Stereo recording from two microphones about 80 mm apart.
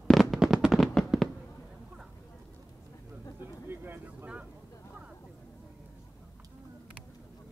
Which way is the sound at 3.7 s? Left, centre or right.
Right.